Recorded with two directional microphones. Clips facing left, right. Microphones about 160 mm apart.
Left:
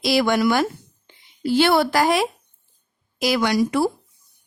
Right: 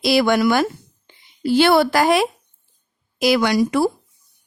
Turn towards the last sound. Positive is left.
turn(degrees=-80)